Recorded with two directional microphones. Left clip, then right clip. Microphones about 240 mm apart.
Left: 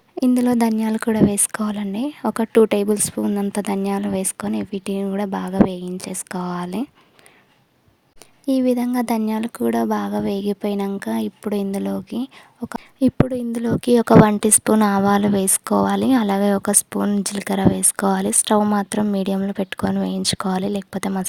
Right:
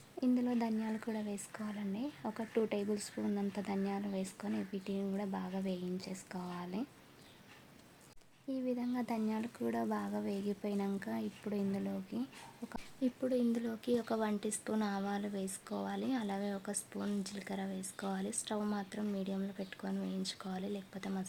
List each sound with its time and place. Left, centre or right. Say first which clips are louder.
0.2 s speech: left 17 dB; left
8.4 s speech: left 19 dB; left